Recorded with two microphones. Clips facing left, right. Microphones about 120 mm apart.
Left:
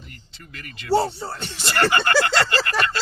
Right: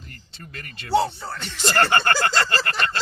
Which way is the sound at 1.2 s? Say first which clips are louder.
Left 2 dB; 30° left (ahead or behind).